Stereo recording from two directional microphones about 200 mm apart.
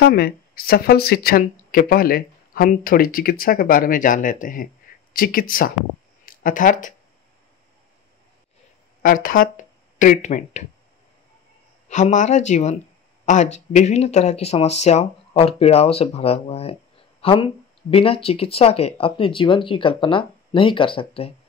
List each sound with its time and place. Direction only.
0.0 s speech: 50° left (ahead or behind)
9.0 s speech: 45° left (ahead or behind)
11.9 s speech: 35° left (ahead or behind)